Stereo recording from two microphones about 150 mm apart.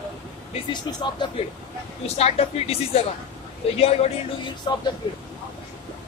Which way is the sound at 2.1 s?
45° left (ahead or behind).